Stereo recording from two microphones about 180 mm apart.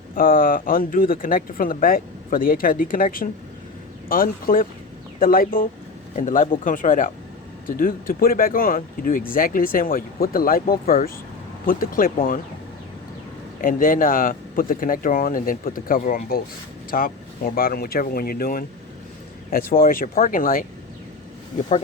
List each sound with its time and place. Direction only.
0.1 s speech: 50° left (ahead or behind)
13.6 s speech: 50° left (ahead or behind)
20.1 s speech: 45° left (ahead or behind)